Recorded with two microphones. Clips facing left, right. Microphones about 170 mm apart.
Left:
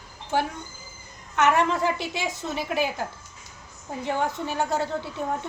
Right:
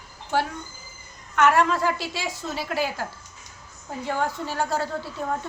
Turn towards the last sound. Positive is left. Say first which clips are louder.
# left 1 dB
turn(degrees=15)  # may be behind; listen again after turning